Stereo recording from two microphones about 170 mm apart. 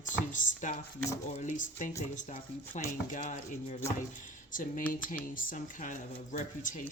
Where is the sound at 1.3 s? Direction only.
45° left (ahead or behind).